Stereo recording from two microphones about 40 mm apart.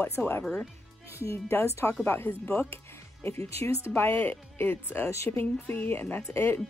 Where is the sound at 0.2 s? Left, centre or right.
Left.